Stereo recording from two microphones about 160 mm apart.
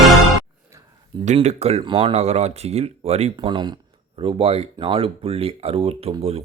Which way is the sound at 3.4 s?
30° right (ahead or behind).